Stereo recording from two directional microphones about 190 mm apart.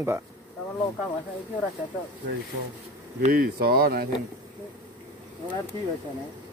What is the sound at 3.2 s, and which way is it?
Speech, 50° right (ahead or behind).